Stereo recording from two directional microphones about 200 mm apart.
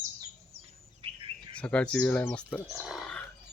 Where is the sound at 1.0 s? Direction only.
30° right (ahead or behind).